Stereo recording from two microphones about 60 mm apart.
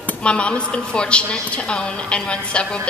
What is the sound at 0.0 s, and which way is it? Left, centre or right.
A woman's voice, centre.